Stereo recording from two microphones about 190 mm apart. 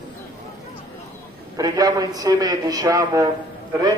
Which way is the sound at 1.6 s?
20° right (ahead or behind).